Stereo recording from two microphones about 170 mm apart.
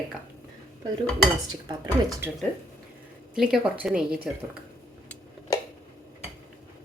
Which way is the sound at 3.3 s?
5° right (ahead or behind).